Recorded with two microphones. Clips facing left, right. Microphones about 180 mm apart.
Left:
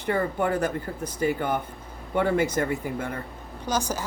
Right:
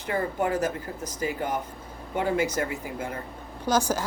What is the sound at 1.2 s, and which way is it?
Speech, 60° left (ahead or behind).